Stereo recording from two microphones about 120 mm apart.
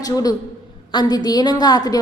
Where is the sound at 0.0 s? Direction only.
30° left (ahead or behind).